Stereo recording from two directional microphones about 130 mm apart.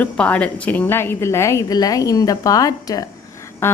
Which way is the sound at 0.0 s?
10° left (ahead or behind).